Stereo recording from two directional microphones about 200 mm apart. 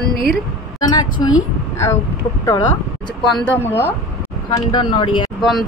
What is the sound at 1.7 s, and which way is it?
Speech, 15° left (ahead or behind).